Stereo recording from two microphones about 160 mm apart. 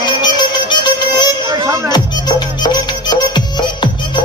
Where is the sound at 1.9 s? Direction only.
25° left (ahead or behind).